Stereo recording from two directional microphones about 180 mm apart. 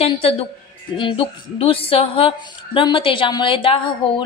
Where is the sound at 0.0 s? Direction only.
30° left (ahead or behind).